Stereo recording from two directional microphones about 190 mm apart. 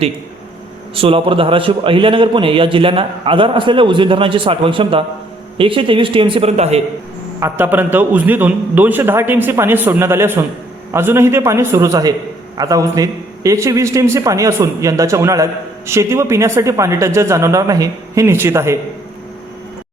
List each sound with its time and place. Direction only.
0.9 s a man's voice: 30° right (ahead or behind)
7.3 s a man's voice: 10° right (ahead or behind)